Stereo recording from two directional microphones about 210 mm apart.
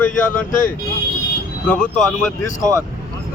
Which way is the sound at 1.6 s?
5° left (ahead or behind).